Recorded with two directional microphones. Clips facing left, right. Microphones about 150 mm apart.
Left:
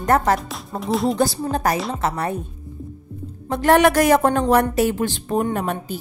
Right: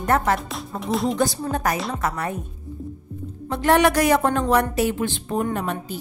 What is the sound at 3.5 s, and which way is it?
A woman's voice, 45° left (ahead or behind).